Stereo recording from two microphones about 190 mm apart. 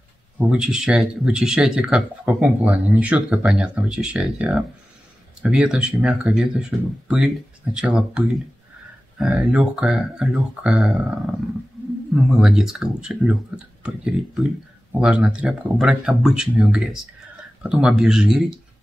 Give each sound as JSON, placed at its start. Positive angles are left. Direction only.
{"t": 0.4, "sound": "speech", "side_deg": -5}
{"t": 12.2, "sound": "speech", "side_deg": -5}